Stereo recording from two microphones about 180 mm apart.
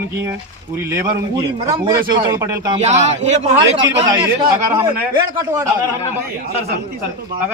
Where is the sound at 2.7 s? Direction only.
40° right (ahead or behind).